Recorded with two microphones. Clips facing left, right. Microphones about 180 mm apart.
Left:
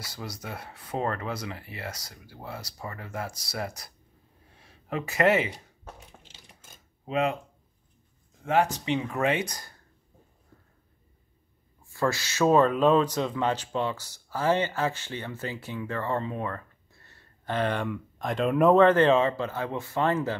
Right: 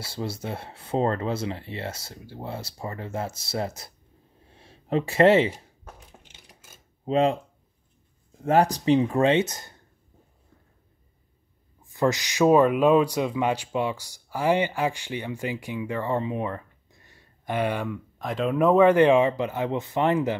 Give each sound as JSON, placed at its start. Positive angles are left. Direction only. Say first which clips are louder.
{"t": 0.0, "sound": "speech", "louder": "right 7 dB", "side_deg": -30}
{"t": 4.5, "sound": "a sound", "louder": "right 7 dB", "side_deg": -30}
{"t": 7.1, "sound": "speech", "louder": "right 5 dB", "side_deg": -30}
{"t": 8.5, "sound": "speech", "louder": "right 5 dB", "side_deg": -40}
{"t": 11.8, "sound": "speech", "louder": "right 4 dB", "side_deg": -20}
{"t": 18.9, "sound": "speech", "louder": "right 3 dB", "side_deg": -15}